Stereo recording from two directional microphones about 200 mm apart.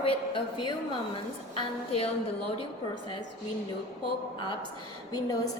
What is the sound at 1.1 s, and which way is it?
Speech, 30° left (ahead or behind).